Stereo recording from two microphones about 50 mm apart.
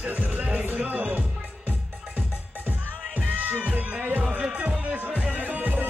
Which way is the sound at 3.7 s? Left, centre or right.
Right.